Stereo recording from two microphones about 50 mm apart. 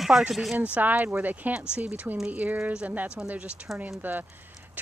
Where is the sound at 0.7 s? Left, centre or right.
Right.